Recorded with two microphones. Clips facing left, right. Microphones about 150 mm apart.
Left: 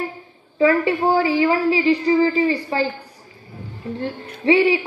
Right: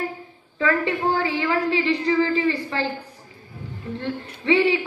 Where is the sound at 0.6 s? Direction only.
10° left (ahead or behind).